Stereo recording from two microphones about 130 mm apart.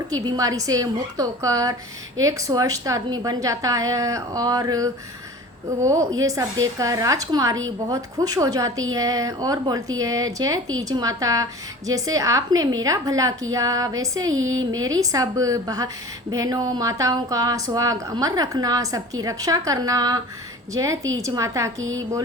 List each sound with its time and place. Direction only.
0.1 s a woman's voice: 30° right (ahead or behind)